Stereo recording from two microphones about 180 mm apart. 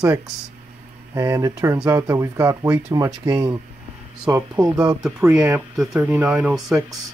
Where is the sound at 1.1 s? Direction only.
15° right (ahead or behind).